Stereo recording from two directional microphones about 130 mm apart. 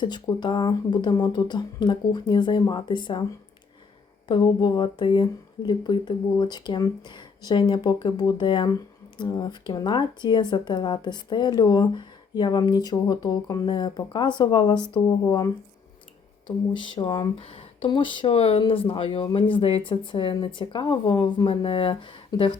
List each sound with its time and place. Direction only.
0.0 s speech: 35° left (ahead or behind)
4.3 s speech: 35° left (ahead or behind)
16.7 s speech: 40° left (ahead or behind)